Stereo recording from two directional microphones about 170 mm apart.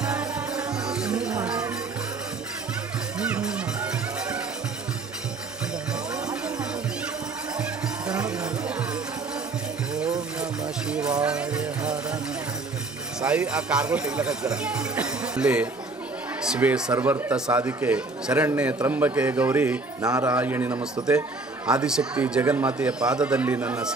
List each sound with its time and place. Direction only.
0.0 s music: 5° right (ahead or behind)
3.2 s music: 5° right (ahead or behind)
6.2 s music: 5° right (ahead or behind)
8.1 s music: 5° right (ahead or behind)
10.4 s music: 5° right (ahead or behind)
13.2 s speech: 5° right (ahead or behind)
20.0 s a man's voice: 20° right (ahead or behind)
20.3 s speech: 10° right (ahead or behind)